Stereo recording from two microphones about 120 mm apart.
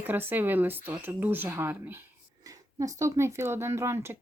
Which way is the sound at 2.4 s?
30° right (ahead or behind).